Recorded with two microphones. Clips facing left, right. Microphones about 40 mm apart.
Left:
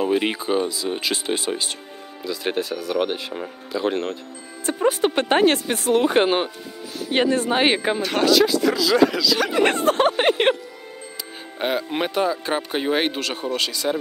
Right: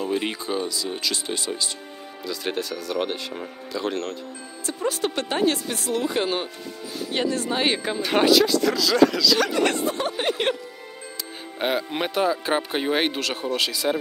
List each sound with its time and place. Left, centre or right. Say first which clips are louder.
0.0 s speech: left 5 dB; left
2.2 s speech: left 3 dB; centre
4.6 s a woman's voice: left 6 dB; left
8.0 s speech: right 3 dB; centre
8.4 s speech: left 2 dB; centre
9.5 s speech: left 3 dB; left
9.8 s speech: left 7 dB; left
11.5 s speech: left 1 dB; centre